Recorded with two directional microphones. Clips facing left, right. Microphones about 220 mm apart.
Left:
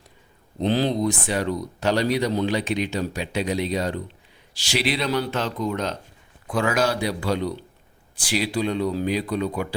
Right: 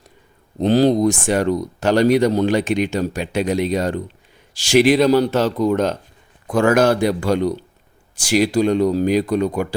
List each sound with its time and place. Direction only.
0.6 s speech: 45° right (ahead or behind)